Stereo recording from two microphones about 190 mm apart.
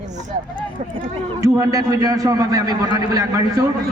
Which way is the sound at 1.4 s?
15° right (ahead or behind).